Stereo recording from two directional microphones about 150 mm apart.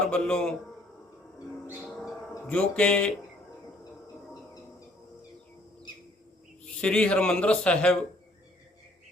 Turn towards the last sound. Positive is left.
turn(degrees=5)  # may be behind; listen again after turning